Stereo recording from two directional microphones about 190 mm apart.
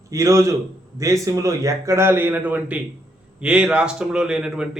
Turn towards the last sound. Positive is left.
turn(degrees=-5)  # may be behind; listen again after turning